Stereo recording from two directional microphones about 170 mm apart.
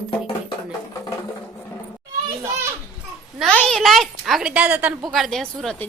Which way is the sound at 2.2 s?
15° right (ahead or behind).